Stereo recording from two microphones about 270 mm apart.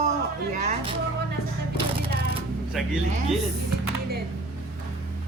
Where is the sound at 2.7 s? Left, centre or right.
Centre.